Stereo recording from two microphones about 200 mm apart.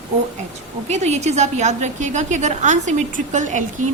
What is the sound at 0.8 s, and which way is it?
A woman's voice, 35° right (ahead or behind).